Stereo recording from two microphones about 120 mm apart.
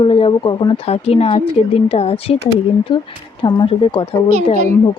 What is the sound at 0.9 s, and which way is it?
Speech, 55° left (ahead or behind).